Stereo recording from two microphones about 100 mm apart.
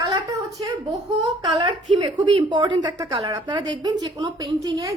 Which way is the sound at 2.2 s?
50° right (ahead or behind).